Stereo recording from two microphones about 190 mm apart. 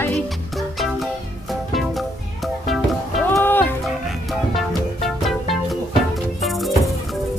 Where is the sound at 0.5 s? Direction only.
Centre (ahead or behind).